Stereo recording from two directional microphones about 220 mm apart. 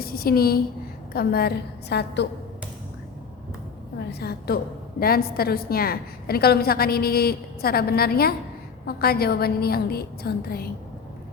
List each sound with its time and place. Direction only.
0.0 s a woman's voice: 45° left (ahead or behind)
4.1 s a woman's voice: 45° left (ahead or behind)